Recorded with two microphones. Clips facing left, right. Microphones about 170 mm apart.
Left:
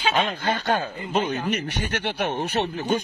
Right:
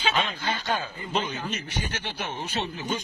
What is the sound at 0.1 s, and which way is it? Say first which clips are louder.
Speech: left 4 dB; 60° left (ahead or behind).